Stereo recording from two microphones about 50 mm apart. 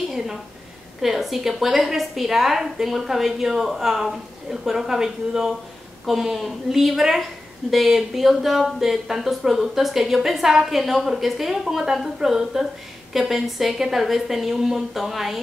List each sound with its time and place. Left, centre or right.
1.0 s a woman's voice: centre